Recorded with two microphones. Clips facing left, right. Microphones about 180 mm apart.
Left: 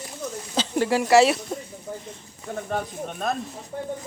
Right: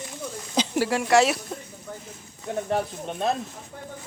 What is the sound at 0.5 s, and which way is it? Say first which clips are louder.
Speech: even; 10° right (ahead or behind).